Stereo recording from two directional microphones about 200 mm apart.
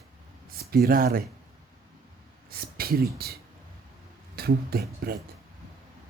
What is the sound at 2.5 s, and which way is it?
Speech, 50° right (ahead or behind).